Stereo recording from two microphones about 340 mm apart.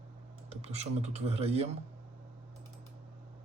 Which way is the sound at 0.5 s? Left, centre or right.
Centre.